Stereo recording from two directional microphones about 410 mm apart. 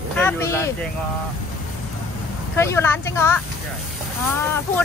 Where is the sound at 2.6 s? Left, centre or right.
Centre.